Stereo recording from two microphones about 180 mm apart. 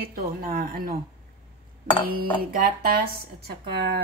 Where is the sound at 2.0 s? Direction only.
55° right (ahead or behind).